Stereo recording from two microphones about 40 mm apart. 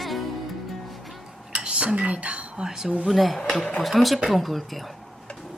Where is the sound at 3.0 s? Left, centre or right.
Centre.